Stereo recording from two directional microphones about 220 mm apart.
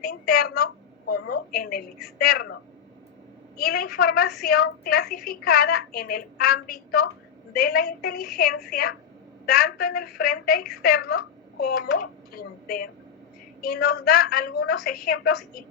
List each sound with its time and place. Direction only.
0.0 s a woman's voice: 45° left (ahead or behind)
3.6 s a woman's voice: 45° left (ahead or behind)